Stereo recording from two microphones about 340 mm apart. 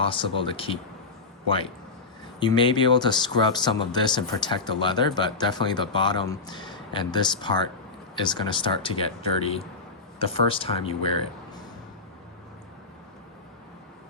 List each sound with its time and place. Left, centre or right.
0.0 s speech: centre
2.4 s speech: centre